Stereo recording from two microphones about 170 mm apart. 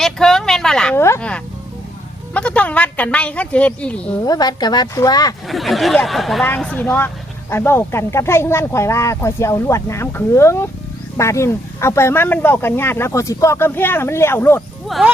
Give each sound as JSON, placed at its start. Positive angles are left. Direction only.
{"t": 0.0, "sound": "a sound", "side_deg": 0}
{"t": 1.0, "sound": "speech", "side_deg": 10}
{"t": 4.3, "sound": "a woman's voice", "side_deg": 25}
{"t": 5.5, "sound": "speech", "side_deg": 0}
{"t": 14.8, "sound": "speech", "side_deg": 0}